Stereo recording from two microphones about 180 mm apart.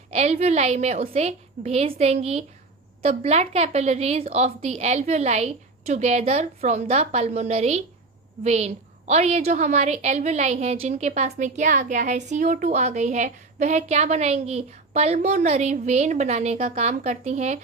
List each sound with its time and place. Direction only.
0.1 s a woman's voice: 40° right (ahead or behind)